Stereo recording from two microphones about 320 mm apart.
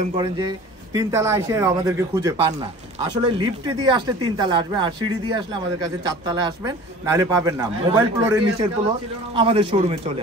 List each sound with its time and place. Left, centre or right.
0.0 s speech: centre